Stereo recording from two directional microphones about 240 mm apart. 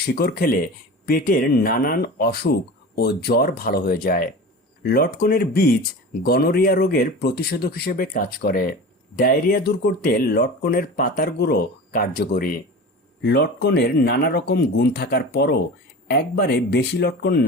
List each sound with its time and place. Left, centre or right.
0.0 s speech: left